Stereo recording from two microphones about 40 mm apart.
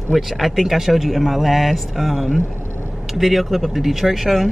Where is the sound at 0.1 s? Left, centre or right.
Centre.